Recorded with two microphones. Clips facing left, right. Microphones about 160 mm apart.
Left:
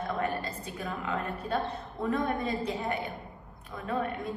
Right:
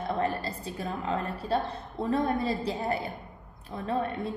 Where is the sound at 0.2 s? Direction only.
30° right (ahead or behind).